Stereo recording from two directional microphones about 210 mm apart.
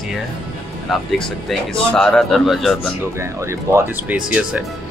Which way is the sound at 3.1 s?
10° right (ahead or behind).